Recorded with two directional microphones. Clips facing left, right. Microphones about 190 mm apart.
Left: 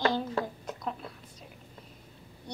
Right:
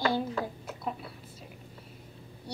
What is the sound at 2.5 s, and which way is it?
Speech, 5° right (ahead or behind).